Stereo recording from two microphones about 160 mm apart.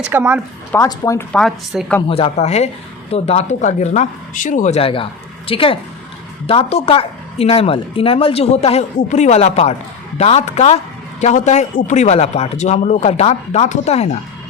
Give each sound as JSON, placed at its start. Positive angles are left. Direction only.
{"t": 0.0, "sound": "speech", "side_deg": -10}
{"t": 0.8, "sound": "speech", "side_deg": 20}
{"t": 1.3, "sound": "speech", "side_deg": 5}
{"t": 2.0, "sound": "speech", "side_deg": 35}